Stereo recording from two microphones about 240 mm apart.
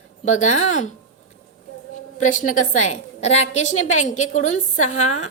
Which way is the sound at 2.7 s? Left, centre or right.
Left.